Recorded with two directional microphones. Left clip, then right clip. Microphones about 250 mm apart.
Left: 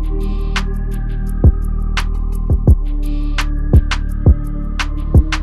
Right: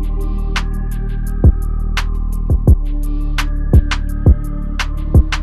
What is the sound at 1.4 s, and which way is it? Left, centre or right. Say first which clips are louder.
Music: even; centre.